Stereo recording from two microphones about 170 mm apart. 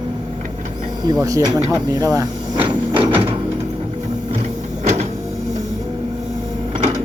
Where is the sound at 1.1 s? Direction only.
20° right (ahead or behind).